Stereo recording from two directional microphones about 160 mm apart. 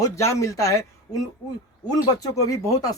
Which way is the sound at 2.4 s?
20° left (ahead or behind).